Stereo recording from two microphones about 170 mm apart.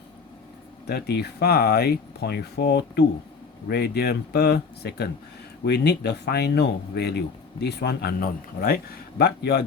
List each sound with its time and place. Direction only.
0.9 s speech: 70° left (ahead or behind)